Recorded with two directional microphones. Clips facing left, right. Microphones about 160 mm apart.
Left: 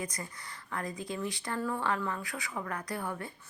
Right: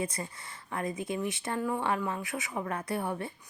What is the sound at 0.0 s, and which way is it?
A woman's voice, 25° right (ahead or behind).